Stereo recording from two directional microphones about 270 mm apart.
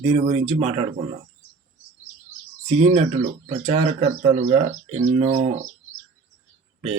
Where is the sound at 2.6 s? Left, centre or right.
Right.